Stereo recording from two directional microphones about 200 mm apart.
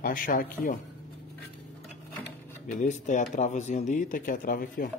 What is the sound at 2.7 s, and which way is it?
Speech, 40° left (ahead or behind).